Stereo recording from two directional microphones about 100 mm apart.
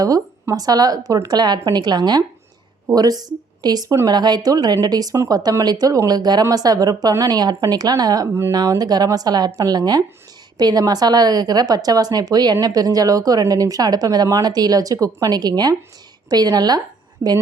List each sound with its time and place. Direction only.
0.0 s a woman's voice: 35° right (ahead or behind)
8.3 s speech: 25° right (ahead or behind)
8.5 s a woman's voice: 40° right (ahead or behind)
17.2 s speech: 30° right (ahead or behind)